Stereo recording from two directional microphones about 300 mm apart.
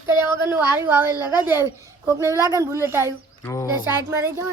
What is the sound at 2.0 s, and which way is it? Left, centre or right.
Speech, centre.